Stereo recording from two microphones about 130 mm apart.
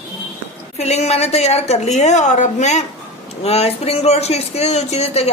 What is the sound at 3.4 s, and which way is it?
Speech, 50° left (ahead or behind).